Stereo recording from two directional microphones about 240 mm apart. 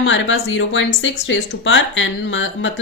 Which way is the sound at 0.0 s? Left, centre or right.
Left.